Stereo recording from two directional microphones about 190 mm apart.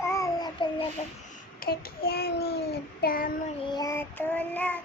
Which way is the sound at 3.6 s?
20° left (ahead or behind).